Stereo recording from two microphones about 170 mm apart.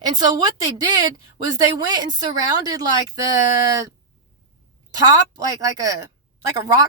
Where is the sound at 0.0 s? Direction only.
25° right (ahead or behind).